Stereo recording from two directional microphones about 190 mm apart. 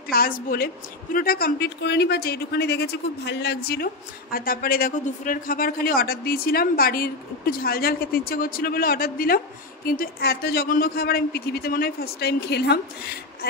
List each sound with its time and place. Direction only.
0.1 s speech: 50° left (ahead or behind)